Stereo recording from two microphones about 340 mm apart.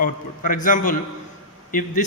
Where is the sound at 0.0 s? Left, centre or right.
Left.